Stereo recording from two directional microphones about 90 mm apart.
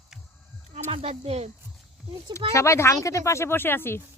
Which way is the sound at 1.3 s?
90° right.